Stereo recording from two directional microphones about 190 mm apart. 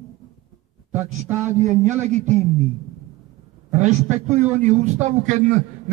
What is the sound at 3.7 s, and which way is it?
A man's voice, 40° right (ahead or behind).